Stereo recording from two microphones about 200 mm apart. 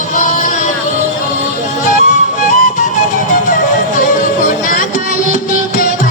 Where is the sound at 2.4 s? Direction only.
40° left (ahead or behind).